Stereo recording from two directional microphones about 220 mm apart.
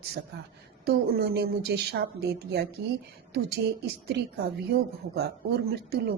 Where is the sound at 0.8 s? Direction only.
45° right (ahead or behind).